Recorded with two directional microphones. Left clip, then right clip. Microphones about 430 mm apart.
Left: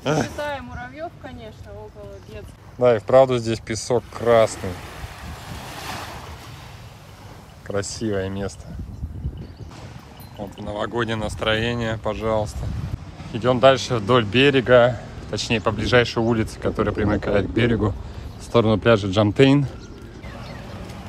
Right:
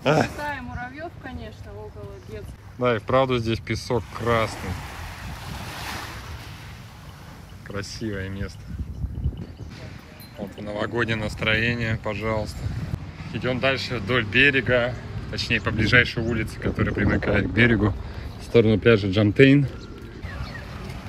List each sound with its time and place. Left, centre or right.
0.0 s a sound: centre
2.8 s speech: centre
7.6 s speech: centre
10.6 s speech: centre